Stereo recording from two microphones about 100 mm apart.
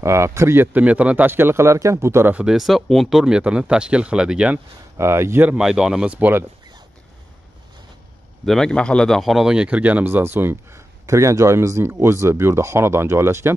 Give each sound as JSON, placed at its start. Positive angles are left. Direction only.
{"t": 0.0, "sound": "speech", "side_deg": -30}
{"t": 0.7, "sound": "speech", "side_deg": -15}
{"t": 2.3, "sound": "speech", "side_deg": -5}
{"t": 4.9, "sound": "speech", "side_deg": -25}
{"t": 5.6, "sound": "speech", "side_deg": -5}
{"t": 8.5, "sound": "speech", "side_deg": 5}